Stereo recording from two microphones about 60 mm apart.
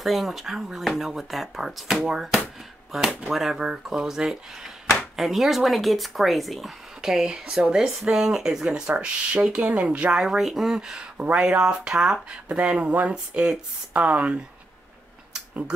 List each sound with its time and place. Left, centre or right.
0.0 s speech: centre
8.9 s speech: right
9.4 s speech: centre